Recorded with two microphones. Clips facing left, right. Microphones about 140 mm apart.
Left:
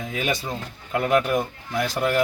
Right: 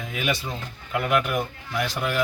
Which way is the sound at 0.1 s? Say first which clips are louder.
Left 1 dB; 40° left (ahead or behind).